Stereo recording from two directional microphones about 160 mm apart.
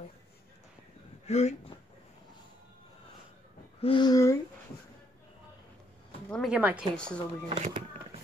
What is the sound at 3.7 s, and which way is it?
Speech, 30° left (ahead or behind).